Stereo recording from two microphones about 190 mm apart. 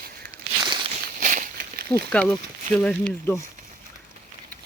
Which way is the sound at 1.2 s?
45° right (ahead or behind).